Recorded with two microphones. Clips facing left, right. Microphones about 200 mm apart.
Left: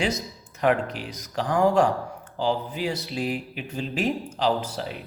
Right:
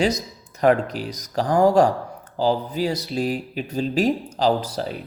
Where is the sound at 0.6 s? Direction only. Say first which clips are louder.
Right 5 dB; 40° right (ahead or behind).